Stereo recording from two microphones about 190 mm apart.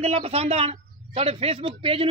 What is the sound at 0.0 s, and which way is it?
A woman's voice, 30° right (ahead or behind).